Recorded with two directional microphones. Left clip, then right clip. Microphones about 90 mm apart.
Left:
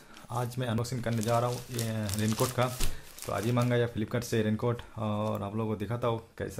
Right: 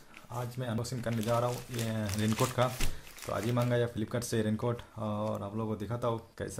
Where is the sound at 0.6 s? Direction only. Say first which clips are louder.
Left 3 dB; 40° left (ahead or behind).